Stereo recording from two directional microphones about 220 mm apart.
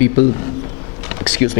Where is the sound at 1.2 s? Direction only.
10° left (ahead or behind).